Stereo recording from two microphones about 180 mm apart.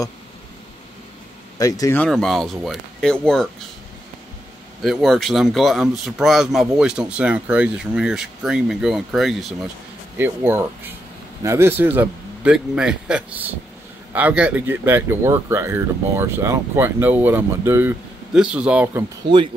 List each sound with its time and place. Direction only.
1.6 s speech: 20° left (ahead or behind)
2.0 s speech: centre (ahead or behind)
4.8 s speech: centre (ahead or behind)
10.1 s speech: 15° right (ahead or behind)
19.2 s speech: 30° right (ahead or behind)